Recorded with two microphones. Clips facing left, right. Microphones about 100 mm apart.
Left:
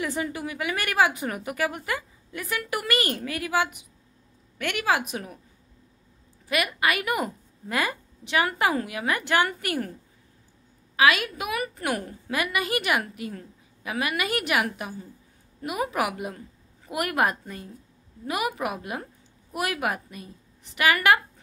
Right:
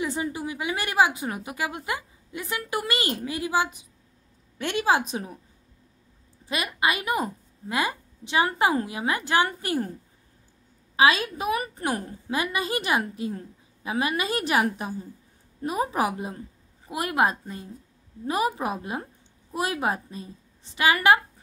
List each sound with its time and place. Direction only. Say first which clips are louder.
0.0 s a woman's voice: right 1 dB; 20° right (ahead or behind)
6.4 s a woman's voice: left 1 dB; 25° right (ahead or behind)
11.0 s a woman's voice: right 1 dB; 30° right (ahead or behind)